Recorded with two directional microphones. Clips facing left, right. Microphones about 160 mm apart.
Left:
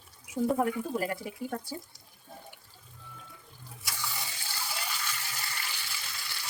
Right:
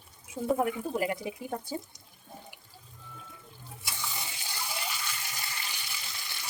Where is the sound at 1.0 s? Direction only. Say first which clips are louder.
Right 1 dB; 15° right (ahead or behind).